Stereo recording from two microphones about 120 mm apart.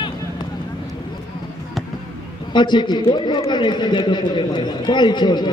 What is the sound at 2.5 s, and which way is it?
A man's voice, 40° left (ahead or behind).